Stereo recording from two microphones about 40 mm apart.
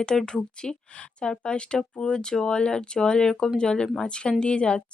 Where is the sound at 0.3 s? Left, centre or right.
Left.